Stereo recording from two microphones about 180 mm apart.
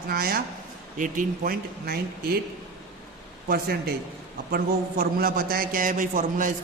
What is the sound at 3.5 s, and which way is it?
A man's voice, 60° right (ahead or behind).